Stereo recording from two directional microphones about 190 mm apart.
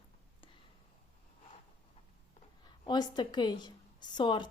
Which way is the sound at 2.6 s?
25° left (ahead or behind).